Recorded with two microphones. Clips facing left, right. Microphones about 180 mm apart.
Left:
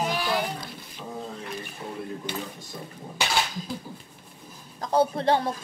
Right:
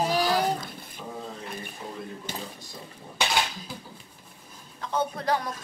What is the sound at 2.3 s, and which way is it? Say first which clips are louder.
Speech: left 3 dB; 45° right (ahead or behind).